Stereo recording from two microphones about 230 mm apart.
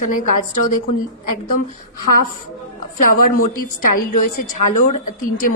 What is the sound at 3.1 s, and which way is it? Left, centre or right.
A woman's voice, left.